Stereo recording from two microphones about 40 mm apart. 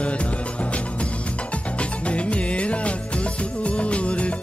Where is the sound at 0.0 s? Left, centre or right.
Left.